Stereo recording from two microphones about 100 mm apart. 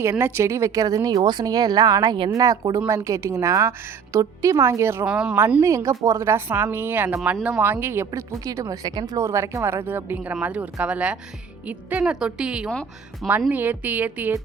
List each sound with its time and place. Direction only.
0.0 s a woman's voice: 25° right (ahead or behind)
5.0 s a woman's voice: 10° right (ahead or behind)
5.6 s a woman's voice: 30° right (ahead or behind)
9.1 s a woman's voice: 25° right (ahead or behind)